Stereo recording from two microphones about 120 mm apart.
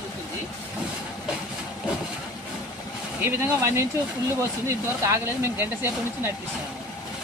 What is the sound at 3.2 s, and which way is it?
Speech, 20° right (ahead or behind).